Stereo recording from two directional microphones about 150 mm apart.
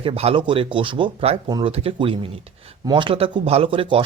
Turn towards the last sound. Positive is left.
turn(degrees=-35)  # may be behind; listen again after turning